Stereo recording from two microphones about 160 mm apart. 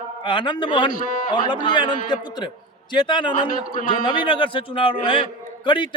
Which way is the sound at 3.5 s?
55° left (ahead or behind).